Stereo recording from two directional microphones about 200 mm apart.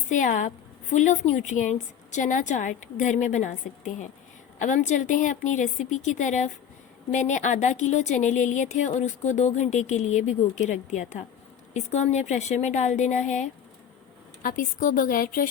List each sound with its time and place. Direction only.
0.1 s a woman's voice: 40° left (ahead or behind)
4.6 s a woman's voice: 40° left (ahead or behind)